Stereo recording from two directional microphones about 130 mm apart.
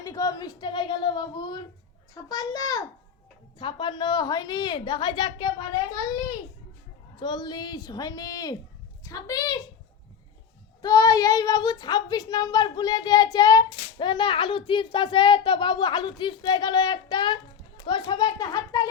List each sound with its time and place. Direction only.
0.0 s a woman's voice: 25° left (ahead or behind)
10.8 s speech: 30° left (ahead or behind)